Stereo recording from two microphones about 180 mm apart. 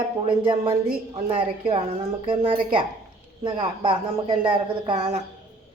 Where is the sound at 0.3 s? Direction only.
30° right (ahead or behind).